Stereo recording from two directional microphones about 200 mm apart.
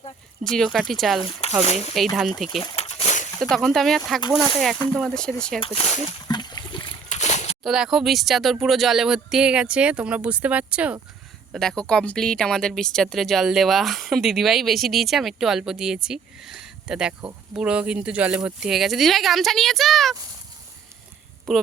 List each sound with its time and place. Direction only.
0.5 s speech: centre (ahead or behind)
1.2 s speech: 35° left (ahead or behind)
2.1 s speech: centre (ahead or behind)
2.6 s crumpling: 30° left (ahead or behind)
3.3 s speech: 5° left (ahead or behind)
5.5 s speech: 25° left (ahead or behind)
6.2 s splash: 20° left (ahead or behind)
7.1 s a sound: 35° left (ahead or behind)
7.6 s speech: centre (ahead or behind)
21.5 s speech: centre (ahead or behind)